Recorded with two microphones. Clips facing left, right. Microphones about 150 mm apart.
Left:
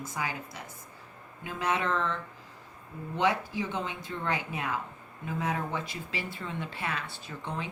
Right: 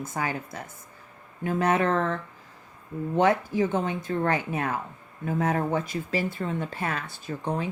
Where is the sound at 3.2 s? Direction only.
45° right (ahead or behind).